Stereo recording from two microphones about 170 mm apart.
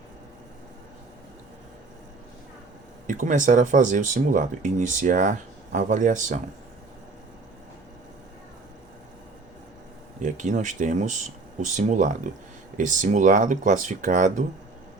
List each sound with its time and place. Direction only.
3.1 s speech: 50° right (ahead or behind)
10.2 s speech: 45° right (ahead or behind)